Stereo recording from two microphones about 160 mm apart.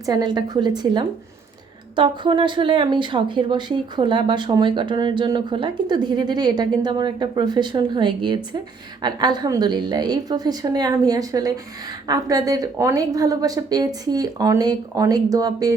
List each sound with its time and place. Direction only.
0.0 s speech: 25° right (ahead or behind)